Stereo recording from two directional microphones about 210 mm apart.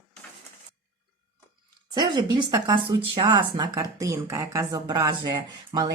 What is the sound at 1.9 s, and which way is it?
Speech, 20° right (ahead or behind).